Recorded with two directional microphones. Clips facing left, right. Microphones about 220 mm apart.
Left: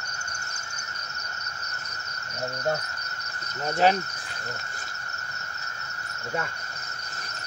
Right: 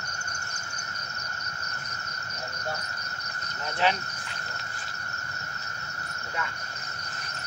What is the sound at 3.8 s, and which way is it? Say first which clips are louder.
Speech: left 5 dB; 40° left (ahead or behind).